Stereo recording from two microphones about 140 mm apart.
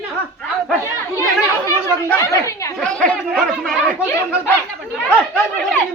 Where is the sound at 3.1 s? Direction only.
5° left (ahead or behind).